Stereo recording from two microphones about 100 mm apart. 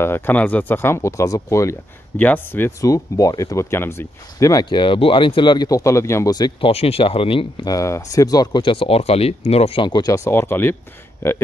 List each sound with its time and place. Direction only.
0.0 s speech: 20° left (ahead or behind)
2.1 s speech: 15° left (ahead or behind)
2.8 s speech: 35° left (ahead or behind)
4.6 s speech: 55° left (ahead or behind)
5.7 s speech: 30° left (ahead or behind)
6.6 s speech: 90° left; by 7.4 s 65° left (ahead or behind)
7.6 s speech: 35° left (ahead or behind)
8.6 s speech: 65° left (ahead or behind); by 9.8 s 80° left
9.8 s speech: 45° left (ahead or behind)
10.1 s speech: 25° left (ahead or behind)